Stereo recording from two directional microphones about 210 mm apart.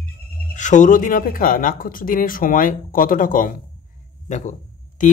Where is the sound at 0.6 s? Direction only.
35° left (ahead or behind).